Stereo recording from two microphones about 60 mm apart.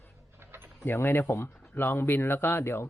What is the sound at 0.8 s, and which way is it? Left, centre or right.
Speech, left.